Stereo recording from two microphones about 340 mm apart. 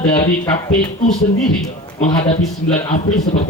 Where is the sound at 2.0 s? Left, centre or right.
Centre.